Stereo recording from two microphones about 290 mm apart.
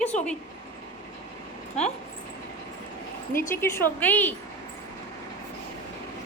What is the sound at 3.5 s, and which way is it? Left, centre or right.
Speech, centre.